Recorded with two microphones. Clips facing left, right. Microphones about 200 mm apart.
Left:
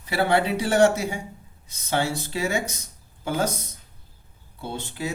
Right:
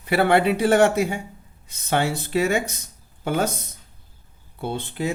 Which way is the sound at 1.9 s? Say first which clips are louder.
Right 3 dB; 60° right (ahead or behind).